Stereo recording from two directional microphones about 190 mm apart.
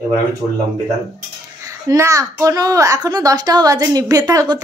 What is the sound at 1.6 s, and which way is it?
A child's voice, 15° right (ahead or behind).